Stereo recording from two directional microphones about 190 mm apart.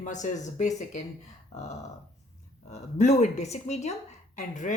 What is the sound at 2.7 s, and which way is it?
Speech, 35° left (ahead or behind).